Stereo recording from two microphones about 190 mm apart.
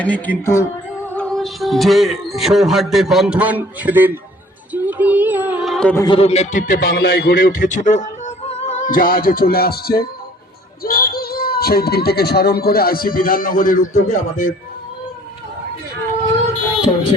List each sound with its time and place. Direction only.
0.0 s speech: 10° left (ahead or behind); by 4.2 s 10° right (ahead or behind)
4.7 s a sound: 10° right (ahead or behind)
6.0 s speech: 30° left (ahead or behind); by 14.5 s 45° left (ahead or behind)